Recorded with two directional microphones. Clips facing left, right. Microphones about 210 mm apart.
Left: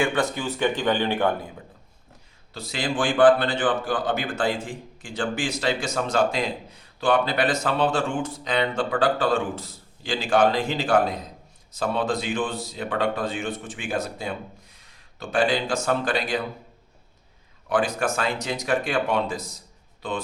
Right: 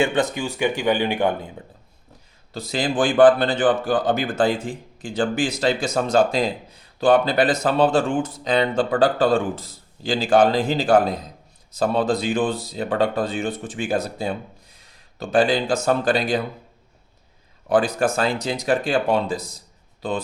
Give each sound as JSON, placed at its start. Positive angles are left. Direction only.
{"t": 0.0, "sound": "speech", "side_deg": -20}
{"t": 2.5, "sound": "speech", "side_deg": -40}
{"t": 17.7, "sound": "speech", "side_deg": -35}